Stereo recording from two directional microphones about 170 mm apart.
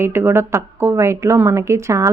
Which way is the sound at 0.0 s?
15° right (ahead or behind).